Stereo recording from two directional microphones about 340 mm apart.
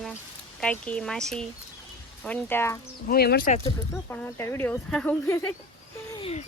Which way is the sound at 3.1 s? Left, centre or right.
Left.